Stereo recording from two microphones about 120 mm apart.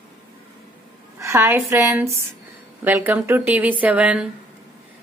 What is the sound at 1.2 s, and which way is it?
A woman's voice, 20° right (ahead or behind).